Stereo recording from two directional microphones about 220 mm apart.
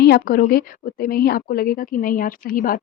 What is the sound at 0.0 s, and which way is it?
Speech, 45° left (ahead or behind).